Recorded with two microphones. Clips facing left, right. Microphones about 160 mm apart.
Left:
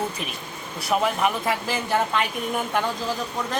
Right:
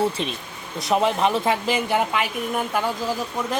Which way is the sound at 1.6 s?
15° right (ahead or behind).